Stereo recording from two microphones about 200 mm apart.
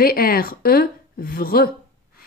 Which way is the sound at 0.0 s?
50° left (ahead or behind).